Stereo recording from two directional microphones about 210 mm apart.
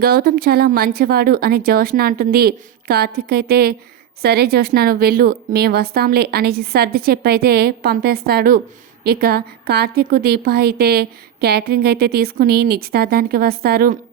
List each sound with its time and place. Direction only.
0.0 s a woman's voice: 45° right (ahead or behind)